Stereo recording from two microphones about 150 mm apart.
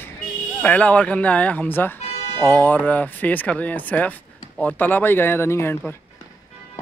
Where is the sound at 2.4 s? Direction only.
10° left (ahead or behind).